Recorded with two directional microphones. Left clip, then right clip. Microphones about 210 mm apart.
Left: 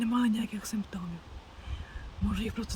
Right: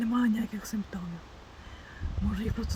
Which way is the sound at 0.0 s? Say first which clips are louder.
Right 1 dB; centre (ahead or behind).